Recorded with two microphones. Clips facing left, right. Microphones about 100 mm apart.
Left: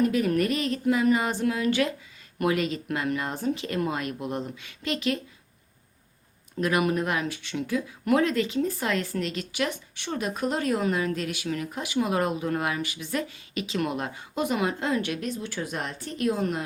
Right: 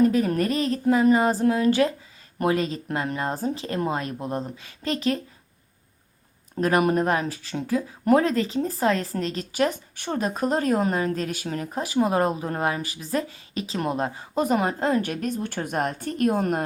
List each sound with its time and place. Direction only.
0.0 s speech: 35° right (ahead or behind)
6.6 s speech: 40° right (ahead or behind)